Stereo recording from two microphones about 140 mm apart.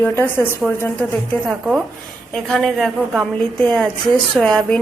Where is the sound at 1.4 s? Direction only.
Centre (ahead or behind).